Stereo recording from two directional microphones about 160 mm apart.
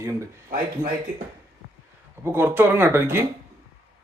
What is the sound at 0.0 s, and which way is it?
Speech, 20° right (ahead or behind).